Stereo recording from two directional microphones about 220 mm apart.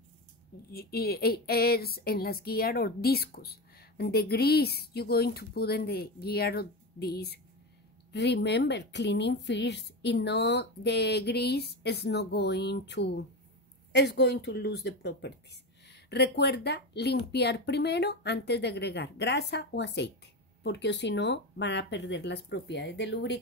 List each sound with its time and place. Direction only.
0.7 s a woman's voice: 45° left (ahead or behind)